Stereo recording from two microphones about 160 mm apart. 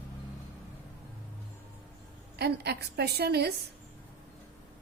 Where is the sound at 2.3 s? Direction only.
90° right.